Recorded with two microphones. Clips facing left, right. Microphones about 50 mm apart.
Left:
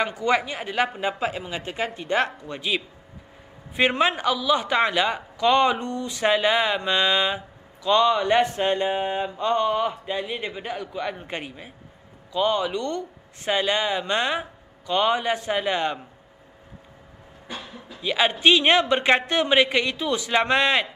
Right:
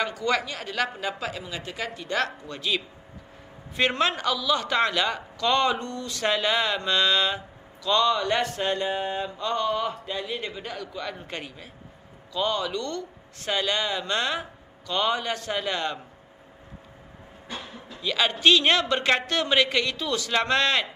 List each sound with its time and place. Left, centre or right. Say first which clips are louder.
0.0 s a man's voice: left 3 dB; left
18.0 s a man's voice: left 2 dB; centre